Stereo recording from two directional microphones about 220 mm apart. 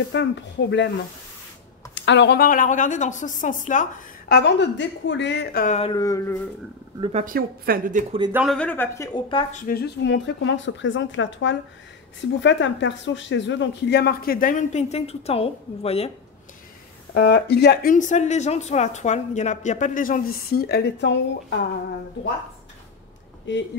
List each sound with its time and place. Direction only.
0.1 s speech: 55° left (ahead or behind)
2.0 s speech: 55° left (ahead or behind); by 4.4 s 35° left (ahead or behind)
4.4 s speech: 50° left (ahead or behind)
5.8 s speech: 20° left (ahead or behind)
7.0 s speech: 30° right (ahead or behind)
8.3 s speech: 5° right (ahead or behind)
8.5 s speech: 10° left (ahead or behind)
9.7 s speech: 50° left (ahead or behind); by 16.1 s 25° left (ahead or behind)
17.1 s speech: 50° left (ahead or behind)
23.5 s speech: 55° left (ahead or behind)